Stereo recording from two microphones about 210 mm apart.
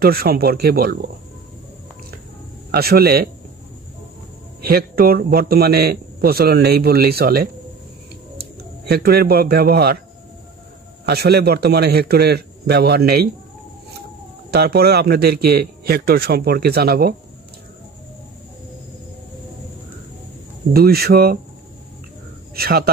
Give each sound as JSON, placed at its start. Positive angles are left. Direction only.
{"t": 0.0, "sound": "a man's voice", "side_deg": -45}
{"t": 2.7, "sound": "a man's voice", "side_deg": -50}
{"t": 4.6, "sound": "a man's voice", "side_deg": -45}
{"t": 11.1, "sound": "a man's voice", "side_deg": -50}
{"t": 14.5, "sound": "a man's voice", "side_deg": -50}
{"t": 20.7, "sound": "a man's voice", "side_deg": -45}
{"t": 22.6, "sound": "a man's voice", "side_deg": -45}